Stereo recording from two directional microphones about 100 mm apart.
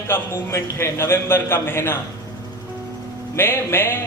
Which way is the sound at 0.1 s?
25° left (ahead or behind).